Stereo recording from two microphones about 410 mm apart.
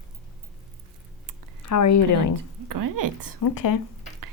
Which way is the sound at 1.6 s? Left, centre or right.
Left.